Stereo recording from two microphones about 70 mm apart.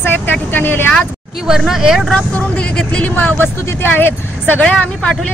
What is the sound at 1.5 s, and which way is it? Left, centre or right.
Speech, centre.